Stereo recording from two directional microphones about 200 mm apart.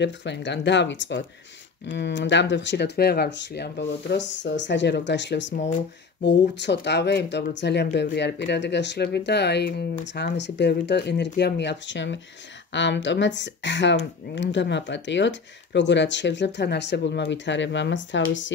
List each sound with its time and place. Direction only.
0.0 s speech: 60° left (ahead or behind)
5.5 s speech: 40° left (ahead or behind)
6.6 s speech: 60° left (ahead or behind)